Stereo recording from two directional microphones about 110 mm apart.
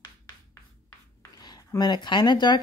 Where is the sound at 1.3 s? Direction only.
40° left (ahead or behind).